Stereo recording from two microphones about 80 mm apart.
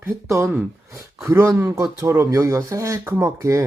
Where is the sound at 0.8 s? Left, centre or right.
Right.